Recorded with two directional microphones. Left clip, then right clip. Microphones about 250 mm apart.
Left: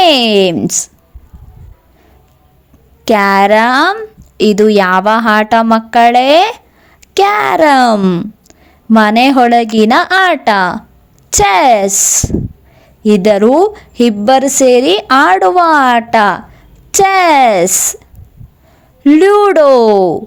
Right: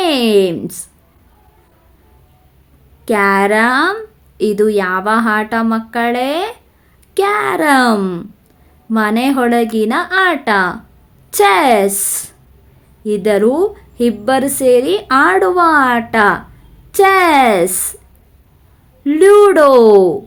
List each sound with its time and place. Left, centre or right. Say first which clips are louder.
0.0 s a woman's voice: left 5 dB; left
3.0 s a woman's voice: left 4 dB; left
19.0 s a woman's voice: left 1 dB; left